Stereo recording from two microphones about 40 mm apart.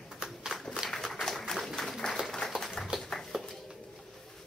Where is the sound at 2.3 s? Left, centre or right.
Centre.